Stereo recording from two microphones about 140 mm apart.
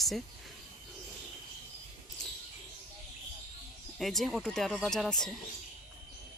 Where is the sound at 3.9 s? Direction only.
Centre (ahead or behind).